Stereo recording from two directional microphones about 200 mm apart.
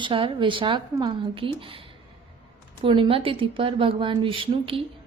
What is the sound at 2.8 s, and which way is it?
A woman's voice, 25° right (ahead or behind).